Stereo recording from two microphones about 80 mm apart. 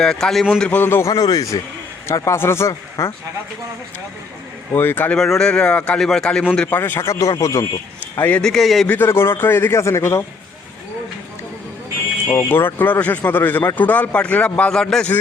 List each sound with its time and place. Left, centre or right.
0.0 s speech: centre
0.6 s speech: centre
0.9 s a man's voice: left
1.1 s a man's voice: left
2.0 s a man's voice: left
4.7 s speech: left
5.1 s speech: centre
6.7 s speech: left
7.1 s a man's voice: left
8.4 s a man's voice: centre
8.9 s a man's voice: left
12.3 s speech: left; by 15.1 s centre